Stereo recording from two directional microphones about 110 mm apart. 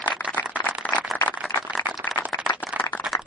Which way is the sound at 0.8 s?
15° left (ahead or behind).